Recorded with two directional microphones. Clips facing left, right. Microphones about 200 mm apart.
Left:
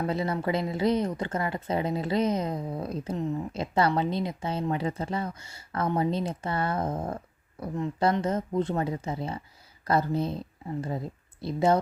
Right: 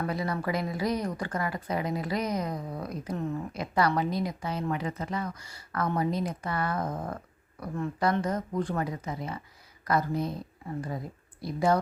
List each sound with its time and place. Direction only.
0.0 s a woman's voice: 25° left (ahead or behind)